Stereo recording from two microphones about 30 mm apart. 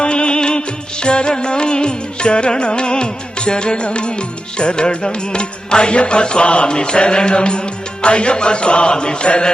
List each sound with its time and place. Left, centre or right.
0.0 s music: left